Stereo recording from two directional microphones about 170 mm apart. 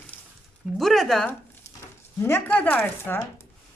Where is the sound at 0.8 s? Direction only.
Centre (ahead or behind).